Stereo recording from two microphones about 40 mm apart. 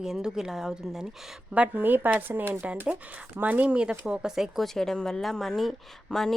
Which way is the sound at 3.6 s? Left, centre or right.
Right.